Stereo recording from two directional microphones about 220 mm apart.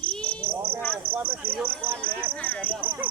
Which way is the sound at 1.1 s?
10° right (ahead or behind).